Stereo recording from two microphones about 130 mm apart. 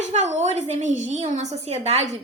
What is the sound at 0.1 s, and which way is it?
A woman's voice, 65° right (ahead or behind).